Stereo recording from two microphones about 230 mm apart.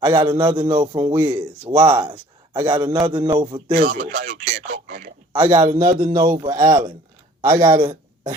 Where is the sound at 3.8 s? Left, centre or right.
Right.